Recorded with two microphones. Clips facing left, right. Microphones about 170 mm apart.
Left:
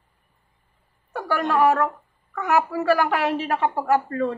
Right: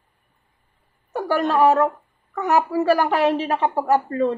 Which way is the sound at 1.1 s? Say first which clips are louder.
Right 3 dB; 20° right (ahead or behind).